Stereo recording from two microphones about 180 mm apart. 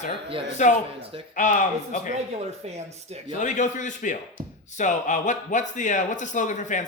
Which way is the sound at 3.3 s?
45° left (ahead or behind).